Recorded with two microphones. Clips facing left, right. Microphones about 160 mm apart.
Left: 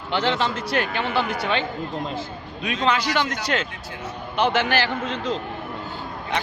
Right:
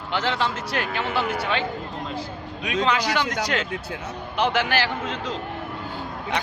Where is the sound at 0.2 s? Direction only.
25° left (ahead or behind).